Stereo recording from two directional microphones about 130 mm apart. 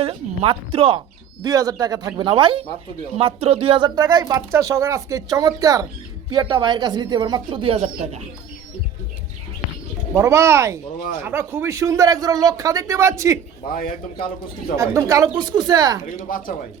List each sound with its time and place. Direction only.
0.0 s speech: 45° right (ahead or behind)
1.5 s speech: 30° right (ahead or behind); by 8.2 s 50° right (ahead or behind)
10.2 s speech: 20° right (ahead or behind)
14.8 s speech: 25° right (ahead or behind)